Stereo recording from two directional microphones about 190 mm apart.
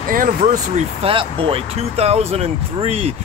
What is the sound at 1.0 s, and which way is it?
Speech, 30° right (ahead or behind).